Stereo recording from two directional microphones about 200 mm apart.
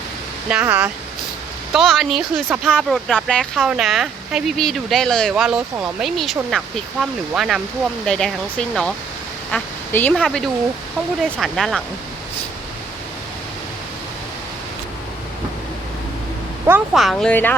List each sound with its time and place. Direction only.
0.4 s speech: 10° right (ahead or behind)
16.6 s speech: 5° right (ahead or behind)